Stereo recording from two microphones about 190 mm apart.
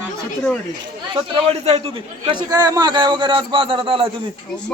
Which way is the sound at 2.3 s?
20° right (ahead or behind).